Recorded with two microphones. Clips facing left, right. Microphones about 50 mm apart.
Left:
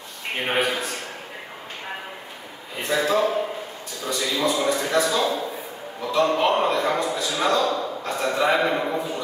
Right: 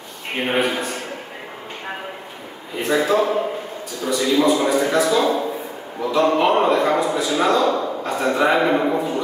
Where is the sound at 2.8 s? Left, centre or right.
Centre.